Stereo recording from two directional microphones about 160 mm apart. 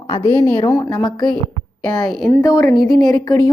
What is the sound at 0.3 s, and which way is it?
A woman's voice, 15° left (ahead or behind).